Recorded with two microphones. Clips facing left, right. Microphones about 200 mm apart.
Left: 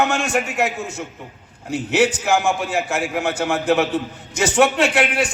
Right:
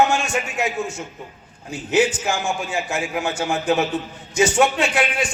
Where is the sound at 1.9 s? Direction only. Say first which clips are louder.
Left 1 dB; 65° left (ahead or behind).